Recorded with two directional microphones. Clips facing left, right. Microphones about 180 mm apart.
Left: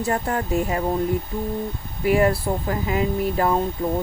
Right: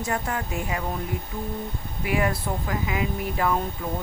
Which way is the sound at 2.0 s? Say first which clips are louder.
Left 7 dB; 35° left (ahead or behind).